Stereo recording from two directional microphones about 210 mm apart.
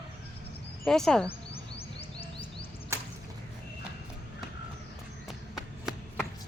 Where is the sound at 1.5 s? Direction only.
25° left (ahead or behind).